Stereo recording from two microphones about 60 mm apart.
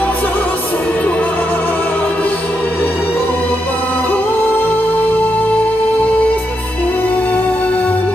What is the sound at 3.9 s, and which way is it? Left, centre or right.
Music, left.